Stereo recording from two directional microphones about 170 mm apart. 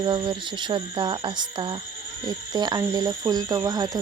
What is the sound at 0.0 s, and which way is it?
Speech, 30° right (ahead or behind).